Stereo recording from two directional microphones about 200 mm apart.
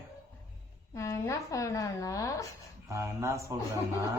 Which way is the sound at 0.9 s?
15° left (ahead or behind).